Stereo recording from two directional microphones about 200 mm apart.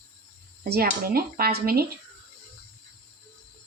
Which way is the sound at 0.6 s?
50° right (ahead or behind).